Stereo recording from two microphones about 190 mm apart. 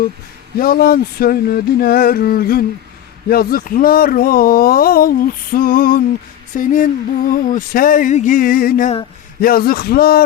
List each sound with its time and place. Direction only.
0.6 s speech: 50° left (ahead or behind)